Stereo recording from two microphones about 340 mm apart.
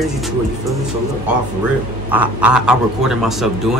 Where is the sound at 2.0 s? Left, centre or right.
Centre.